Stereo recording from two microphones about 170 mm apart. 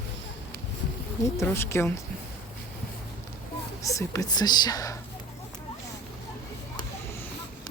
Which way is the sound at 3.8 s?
20° left (ahead or behind).